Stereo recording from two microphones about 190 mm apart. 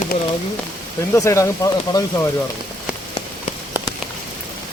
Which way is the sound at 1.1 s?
15° left (ahead or behind).